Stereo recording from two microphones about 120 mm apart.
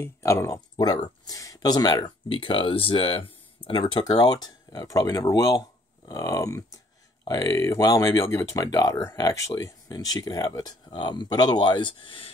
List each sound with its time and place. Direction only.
0.0 s speech: 25° left (ahead or behind); by 12.3 s 45° left (ahead or behind)